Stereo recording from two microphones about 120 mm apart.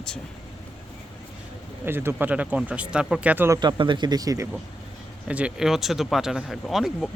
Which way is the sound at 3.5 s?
40° right (ahead or behind).